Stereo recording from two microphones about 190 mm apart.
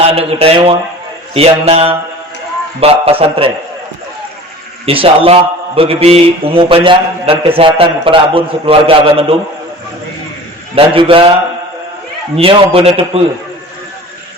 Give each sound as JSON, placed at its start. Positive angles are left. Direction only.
{"t": 0.0, "sound": "a man's voice", "side_deg": -30}
{"t": 4.9, "sound": "a man's voice", "side_deg": -30}
{"t": 10.8, "sound": "a man's voice", "side_deg": -30}
{"t": 12.4, "sound": "a man's voice", "side_deg": -30}